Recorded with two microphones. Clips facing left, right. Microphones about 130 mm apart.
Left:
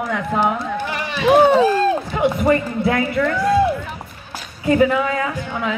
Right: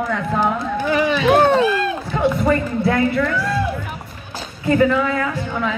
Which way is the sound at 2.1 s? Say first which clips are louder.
Left 1 dB; 15° left (ahead or behind).